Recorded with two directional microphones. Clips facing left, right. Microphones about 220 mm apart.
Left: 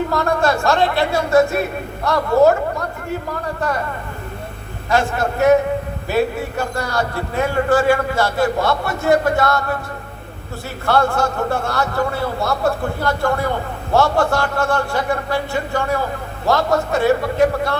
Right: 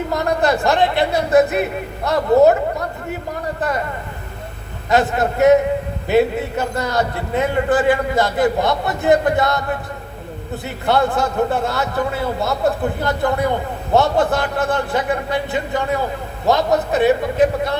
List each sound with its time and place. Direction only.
0.1 s a man's voice: 20° right (ahead or behind)
4.9 s a man's voice: 20° right (ahead or behind)
10.8 s a man's voice: 20° right (ahead or behind)